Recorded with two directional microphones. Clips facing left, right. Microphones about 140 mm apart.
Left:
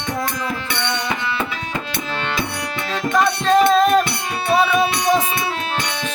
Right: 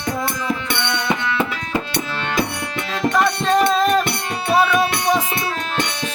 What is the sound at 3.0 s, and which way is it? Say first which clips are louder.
Music: even; centre (ahead or behind).